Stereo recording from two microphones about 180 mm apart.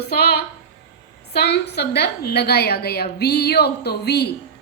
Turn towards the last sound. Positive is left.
turn(degrees=65)  # may be behind; listen again after turning